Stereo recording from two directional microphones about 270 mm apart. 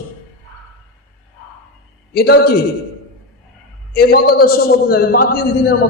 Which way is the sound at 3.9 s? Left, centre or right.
Left.